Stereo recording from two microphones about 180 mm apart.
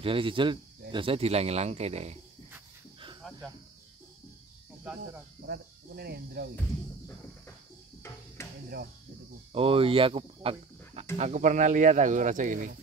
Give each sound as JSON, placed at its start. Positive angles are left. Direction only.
{"t": 0.0, "sound": "speech", "side_deg": -30}
{"t": 5.5, "sound": "speech", "side_deg": -60}
{"t": 8.4, "sound": "cricket", "side_deg": 15}
{"t": 9.5, "sound": "speech", "side_deg": -30}
{"t": 11.1, "sound": "speech", "side_deg": -40}